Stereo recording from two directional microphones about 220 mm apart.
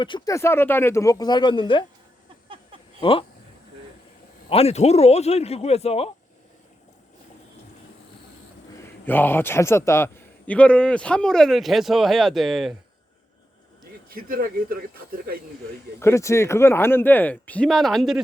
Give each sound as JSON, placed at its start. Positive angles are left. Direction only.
{"t": 0.0, "sound": "speech", "side_deg": 20}
{"t": 3.0, "sound": "a man's voice", "side_deg": 25}
{"t": 4.4, "sound": "a man's voice", "side_deg": 25}
{"t": 8.8, "sound": "a man's voice", "side_deg": 10}
{"t": 14.1, "sound": "speech", "side_deg": -40}
{"t": 16.0, "sound": "speech", "side_deg": 10}